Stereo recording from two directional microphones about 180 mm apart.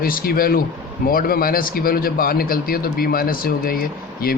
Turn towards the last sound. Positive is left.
turn(degrees=55)  # may be behind; listen again after turning